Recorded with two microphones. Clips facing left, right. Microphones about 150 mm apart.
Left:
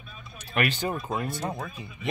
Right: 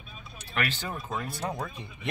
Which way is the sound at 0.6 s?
15° left (ahead or behind).